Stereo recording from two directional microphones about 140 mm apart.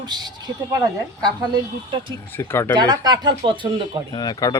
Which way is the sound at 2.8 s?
30° right (ahead or behind).